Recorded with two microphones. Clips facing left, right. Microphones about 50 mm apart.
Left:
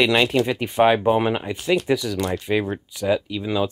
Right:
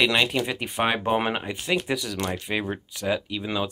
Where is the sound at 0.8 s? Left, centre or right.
Centre.